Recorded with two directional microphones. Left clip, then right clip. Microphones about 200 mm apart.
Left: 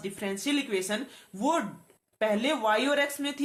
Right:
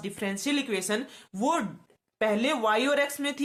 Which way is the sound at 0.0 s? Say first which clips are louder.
Right 1 dB; 35° right (ahead or behind).